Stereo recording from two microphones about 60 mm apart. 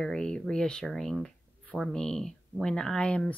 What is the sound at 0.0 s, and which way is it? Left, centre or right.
Speech, centre.